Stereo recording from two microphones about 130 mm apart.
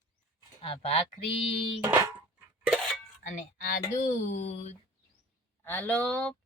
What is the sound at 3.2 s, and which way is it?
Speech, 80° left.